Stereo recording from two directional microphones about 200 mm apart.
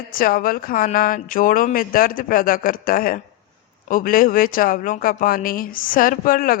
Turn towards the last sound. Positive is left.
turn(degrees=45)  # may be behind; listen again after turning